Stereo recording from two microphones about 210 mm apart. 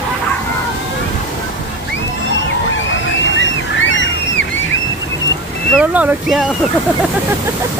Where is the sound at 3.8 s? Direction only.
60° left (ahead or behind).